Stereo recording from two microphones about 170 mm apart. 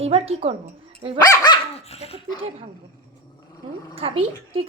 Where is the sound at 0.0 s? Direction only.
35° right (ahead or behind).